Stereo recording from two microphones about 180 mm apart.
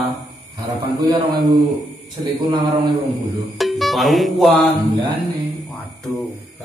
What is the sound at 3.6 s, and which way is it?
Music, centre (ahead or behind).